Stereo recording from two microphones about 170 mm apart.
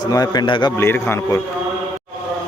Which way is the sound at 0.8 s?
15° left (ahead or behind).